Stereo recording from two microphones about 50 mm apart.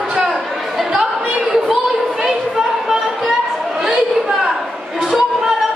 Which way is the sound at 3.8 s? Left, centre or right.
Centre.